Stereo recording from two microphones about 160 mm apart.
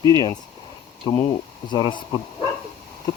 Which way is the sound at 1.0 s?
20° left (ahead or behind).